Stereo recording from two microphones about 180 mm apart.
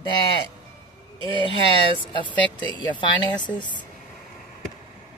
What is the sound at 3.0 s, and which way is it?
Speech, 25° left (ahead or behind).